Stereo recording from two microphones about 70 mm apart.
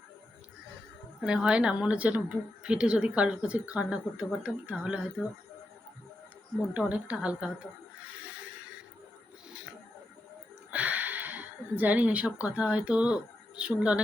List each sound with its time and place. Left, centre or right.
1.2 s speech: centre
6.7 s speech: centre
8.2 s a sound: centre
10.7 s speech: right